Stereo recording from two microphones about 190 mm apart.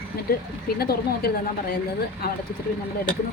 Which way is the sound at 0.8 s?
55° left (ahead or behind).